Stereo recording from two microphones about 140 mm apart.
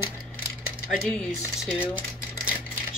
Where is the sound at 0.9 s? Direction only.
5° left (ahead or behind).